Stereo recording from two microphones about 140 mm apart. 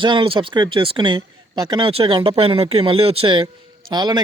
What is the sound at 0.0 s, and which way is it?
A man's voice, 35° right (ahead or behind).